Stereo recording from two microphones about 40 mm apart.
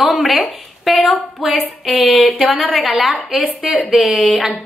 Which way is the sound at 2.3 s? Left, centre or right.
Centre.